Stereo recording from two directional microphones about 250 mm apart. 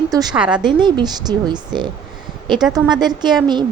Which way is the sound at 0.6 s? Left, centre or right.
Centre.